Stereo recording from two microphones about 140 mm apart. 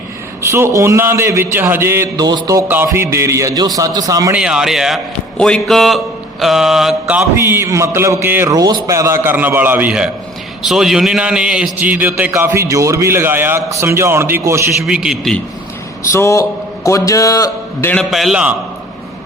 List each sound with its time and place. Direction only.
0.5 s a man's voice: 20° right (ahead or behind)
4.4 s mantra: 5° right (ahead or behind)
7.4 s a man's voice: 20° right (ahead or behind)
14.8 s mantra: 5° right (ahead or behind)
16.1 s a man's voice: 20° left (ahead or behind)
17.9 s mantra: centre (ahead or behind)